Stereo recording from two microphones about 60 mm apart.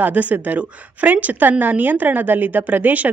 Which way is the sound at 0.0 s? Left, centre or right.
Right.